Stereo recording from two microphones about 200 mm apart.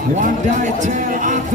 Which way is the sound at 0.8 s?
40° right (ahead or behind).